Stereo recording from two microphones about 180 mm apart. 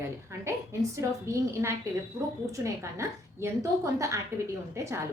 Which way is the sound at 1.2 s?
15° right (ahead or behind).